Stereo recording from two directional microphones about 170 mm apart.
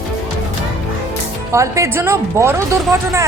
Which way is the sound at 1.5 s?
15° right (ahead or behind).